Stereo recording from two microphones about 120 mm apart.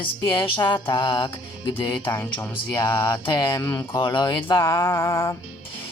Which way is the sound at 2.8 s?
20° left (ahead or behind).